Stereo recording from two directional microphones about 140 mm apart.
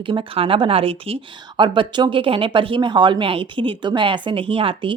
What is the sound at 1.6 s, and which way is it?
Speech, 35° right (ahead or behind).